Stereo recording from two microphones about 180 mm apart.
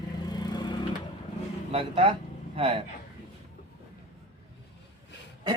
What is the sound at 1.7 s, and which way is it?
A man's voice, 30° right (ahead or behind).